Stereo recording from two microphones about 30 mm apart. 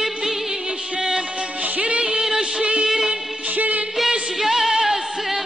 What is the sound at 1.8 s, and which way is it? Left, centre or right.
Music, right.